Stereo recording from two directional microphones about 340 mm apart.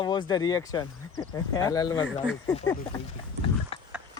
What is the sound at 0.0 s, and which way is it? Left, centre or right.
Speech, centre.